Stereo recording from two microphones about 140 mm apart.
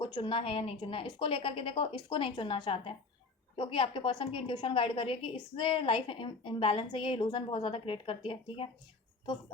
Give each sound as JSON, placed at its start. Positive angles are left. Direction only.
{"t": 0.0, "sound": "a woman's voice", "side_deg": 35}